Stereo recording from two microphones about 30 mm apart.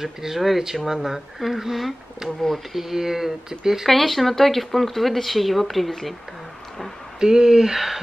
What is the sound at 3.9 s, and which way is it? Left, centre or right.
Speech, centre.